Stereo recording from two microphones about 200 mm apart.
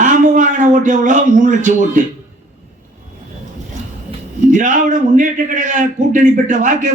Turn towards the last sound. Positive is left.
turn(degrees=-40)  # may be behind; listen again after turning